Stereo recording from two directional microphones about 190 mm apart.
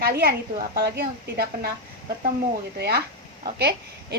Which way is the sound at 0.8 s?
55° right (ahead or behind).